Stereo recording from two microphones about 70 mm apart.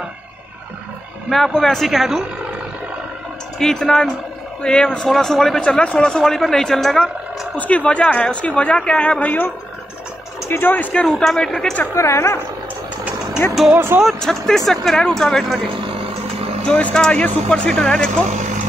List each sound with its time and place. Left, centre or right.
1.3 s speech: centre
3.5 s speech: centre
5.6 s speech: centre
7.5 s speech: left
10.5 s speech: left
11.1 s speech: centre
11.9 s speech: left
13.7 s speech: right
14.0 s speech: centre
16.6 s speech: centre